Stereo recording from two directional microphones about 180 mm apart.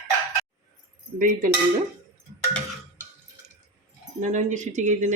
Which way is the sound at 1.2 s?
45° right (ahead or behind).